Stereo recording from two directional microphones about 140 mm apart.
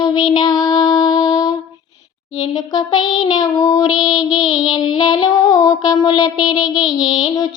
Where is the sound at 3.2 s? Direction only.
30° left (ahead or behind).